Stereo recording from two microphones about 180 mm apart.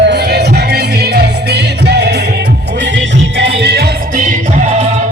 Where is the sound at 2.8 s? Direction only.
80° right; by 4.2 s 65° right (ahead or behind).